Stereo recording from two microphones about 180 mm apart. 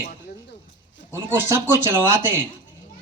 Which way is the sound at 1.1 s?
15° right (ahead or behind).